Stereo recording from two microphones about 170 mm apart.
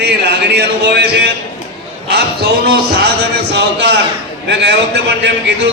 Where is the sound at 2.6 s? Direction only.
75° right (ahead or behind).